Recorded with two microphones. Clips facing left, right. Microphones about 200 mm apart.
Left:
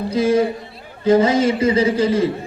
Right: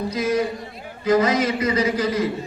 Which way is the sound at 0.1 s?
30° left (ahead or behind).